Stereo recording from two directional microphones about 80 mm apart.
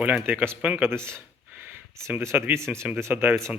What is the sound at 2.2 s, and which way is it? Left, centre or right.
Speech, right.